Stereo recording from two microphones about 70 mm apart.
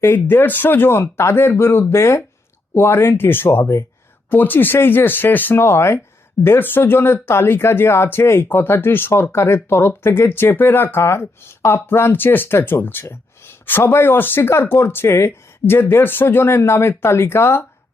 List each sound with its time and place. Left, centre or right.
0.0 s speech: left
4.3 s speech: left